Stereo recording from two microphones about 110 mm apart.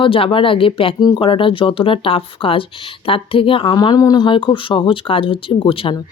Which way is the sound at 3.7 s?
40° left (ahead or behind).